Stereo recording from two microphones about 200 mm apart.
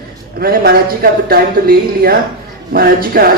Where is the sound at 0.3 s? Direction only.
50° right (ahead or behind).